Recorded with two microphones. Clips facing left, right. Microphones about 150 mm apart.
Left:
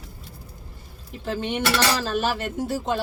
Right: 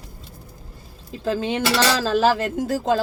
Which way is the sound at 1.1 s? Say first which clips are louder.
Right 4 dB; 90° right.